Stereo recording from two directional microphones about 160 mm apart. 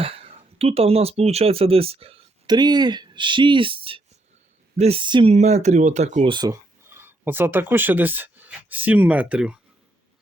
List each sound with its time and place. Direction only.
0.0 s speech: 35° right (ahead or behind)
5.3 s speech: 45° right (ahead or behind)
6.2 s speech: 25° right (ahead or behind)
6.8 s speech: 15° right (ahead or behind)